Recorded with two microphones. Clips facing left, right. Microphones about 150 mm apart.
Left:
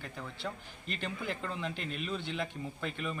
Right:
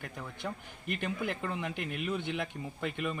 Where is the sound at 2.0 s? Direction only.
15° right (ahead or behind).